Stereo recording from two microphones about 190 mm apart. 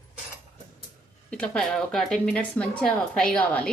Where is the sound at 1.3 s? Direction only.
5° left (ahead or behind).